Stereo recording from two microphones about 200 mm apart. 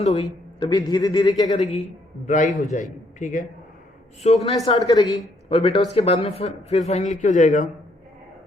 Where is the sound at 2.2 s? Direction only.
40° left (ahead or behind).